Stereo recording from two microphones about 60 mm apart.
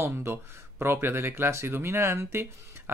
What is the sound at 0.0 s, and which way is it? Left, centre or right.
Speech, right.